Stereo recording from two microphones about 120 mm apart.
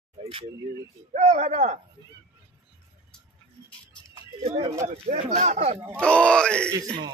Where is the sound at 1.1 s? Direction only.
75° right (ahead or behind).